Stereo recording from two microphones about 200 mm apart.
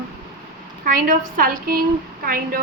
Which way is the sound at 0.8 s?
40° right (ahead or behind).